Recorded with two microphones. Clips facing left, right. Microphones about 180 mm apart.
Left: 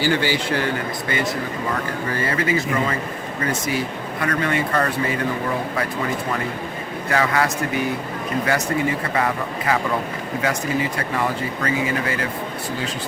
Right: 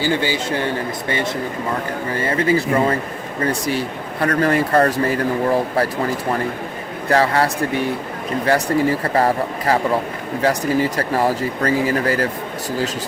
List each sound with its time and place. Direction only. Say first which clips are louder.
0.0 s speech: right 1 dB; 20° right (ahead or behind)
2.2 s speech: right 5 dB; 30° right (ahead or behind)
7.1 s speech: right 4 dB; 30° right (ahead or behind)